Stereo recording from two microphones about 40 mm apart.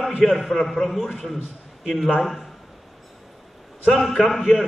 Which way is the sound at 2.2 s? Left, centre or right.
Centre.